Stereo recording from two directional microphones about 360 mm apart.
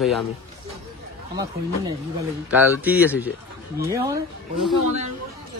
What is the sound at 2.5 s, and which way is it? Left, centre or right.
A man's voice, centre.